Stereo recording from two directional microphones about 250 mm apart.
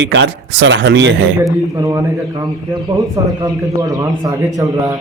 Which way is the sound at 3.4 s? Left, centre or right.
Centre.